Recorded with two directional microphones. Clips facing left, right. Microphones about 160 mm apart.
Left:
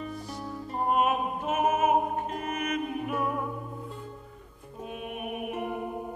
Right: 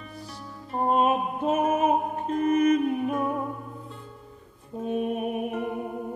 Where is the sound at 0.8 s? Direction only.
30° right (ahead or behind).